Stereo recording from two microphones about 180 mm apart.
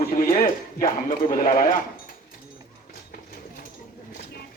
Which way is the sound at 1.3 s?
50° left (ahead or behind).